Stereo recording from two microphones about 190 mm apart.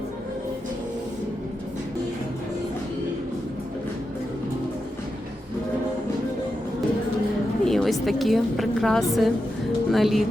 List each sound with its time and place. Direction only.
7.6 s a woman's voice: centre (ahead or behind)